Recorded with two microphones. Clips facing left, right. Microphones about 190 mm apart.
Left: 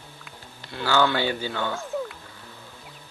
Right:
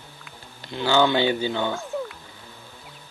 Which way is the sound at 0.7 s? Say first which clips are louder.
Right 3 dB; 20° right (ahead or behind).